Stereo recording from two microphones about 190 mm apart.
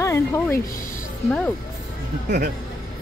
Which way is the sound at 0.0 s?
15° left (ahead or behind).